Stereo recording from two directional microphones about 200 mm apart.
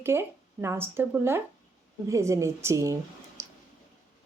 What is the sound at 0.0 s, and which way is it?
Speech, 10° right (ahead or behind).